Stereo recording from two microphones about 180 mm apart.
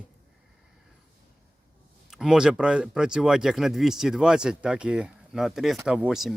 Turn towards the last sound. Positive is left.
turn(degrees=-5)  # may be behind; listen again after turning